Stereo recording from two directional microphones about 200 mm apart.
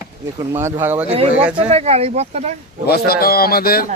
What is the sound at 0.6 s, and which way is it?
Speech, 15° right (ahead or behind).